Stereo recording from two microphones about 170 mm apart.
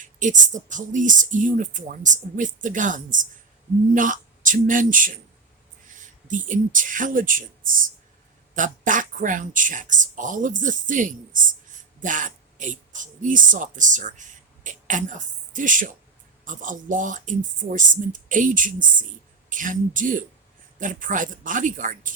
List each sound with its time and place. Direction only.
0.0 s speech: 50° right (ahead or behind)
6.2 s a woman's voice: 50° right (ahead or behind)